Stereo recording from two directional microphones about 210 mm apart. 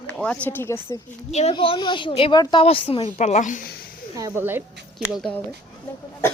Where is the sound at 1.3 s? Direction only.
30° left (ahead or behind).